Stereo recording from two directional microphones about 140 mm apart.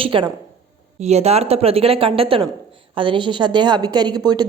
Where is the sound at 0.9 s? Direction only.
50° right (ahead or behind).